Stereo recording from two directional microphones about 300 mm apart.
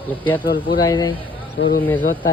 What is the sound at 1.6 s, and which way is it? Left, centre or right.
Speech, left.